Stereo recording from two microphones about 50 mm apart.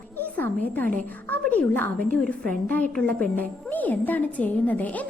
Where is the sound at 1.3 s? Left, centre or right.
Left.